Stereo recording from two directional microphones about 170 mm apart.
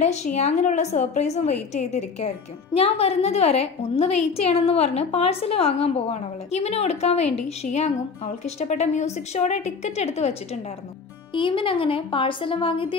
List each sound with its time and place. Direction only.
0.0 s a woman's voice: 45° left (ahead or behind)